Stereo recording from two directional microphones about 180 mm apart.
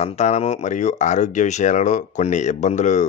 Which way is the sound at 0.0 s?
35° left (ahead or behind).